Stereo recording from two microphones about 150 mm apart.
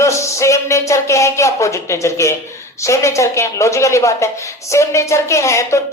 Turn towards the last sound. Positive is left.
turn(degrees=20)  # may be behind; listen again after turning